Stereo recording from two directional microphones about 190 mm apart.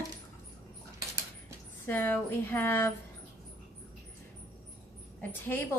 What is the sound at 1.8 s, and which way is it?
Speech, 10° left (ahead or behind).